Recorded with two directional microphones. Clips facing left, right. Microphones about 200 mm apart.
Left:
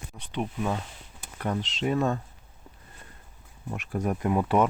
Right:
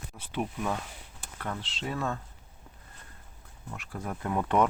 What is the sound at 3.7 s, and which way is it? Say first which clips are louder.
Speech: left 8 dB; 20° left (ahead or behind).